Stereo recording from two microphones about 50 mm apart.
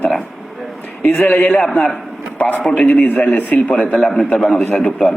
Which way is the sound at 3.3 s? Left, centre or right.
Left.